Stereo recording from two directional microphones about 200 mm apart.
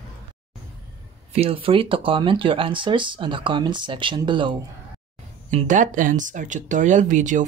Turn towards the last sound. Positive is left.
turn(degrees=-40)  # may be behind; listen again after turning